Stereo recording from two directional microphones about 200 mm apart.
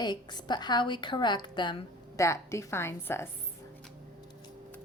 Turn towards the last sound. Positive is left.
turn(degrees=10)  # may be behind; listen again after turning